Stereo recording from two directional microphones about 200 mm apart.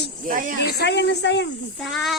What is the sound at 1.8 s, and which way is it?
Speech, centre (ahead or behind).